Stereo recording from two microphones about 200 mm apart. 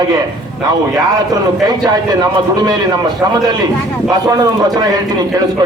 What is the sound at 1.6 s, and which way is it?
A man's voice, 20° right (ahead or behind).